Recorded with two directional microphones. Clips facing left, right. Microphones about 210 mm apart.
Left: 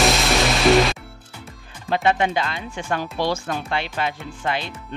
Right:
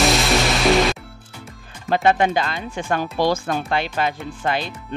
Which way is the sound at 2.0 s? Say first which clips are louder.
Right 3 dB; 45° right (ahead or behind).